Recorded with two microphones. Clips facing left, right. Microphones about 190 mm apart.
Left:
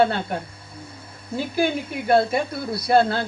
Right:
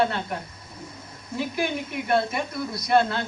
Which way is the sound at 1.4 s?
30° left (ahead or behind).